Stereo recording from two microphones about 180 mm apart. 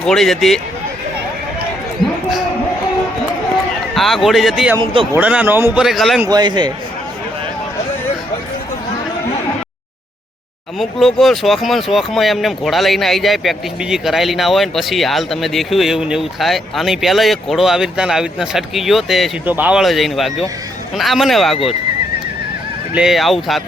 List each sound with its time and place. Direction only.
0.0 s speech: centre (ahead or behind)
3.9 s speech: centre (ahead or behind)
6.2 s a man's voice: 20° right (ahead or behind)
10.8 s speech: centre (ahead or behind)
23.0 s speech: centre (ahead or behind)